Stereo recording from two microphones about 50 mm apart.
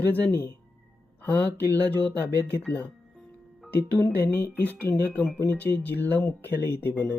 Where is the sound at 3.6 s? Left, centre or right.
Left.